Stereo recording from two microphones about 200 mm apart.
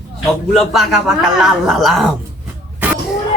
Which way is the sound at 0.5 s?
Centre (ahead or behind).